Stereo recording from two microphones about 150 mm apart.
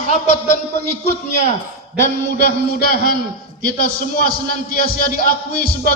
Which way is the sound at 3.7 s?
90° left.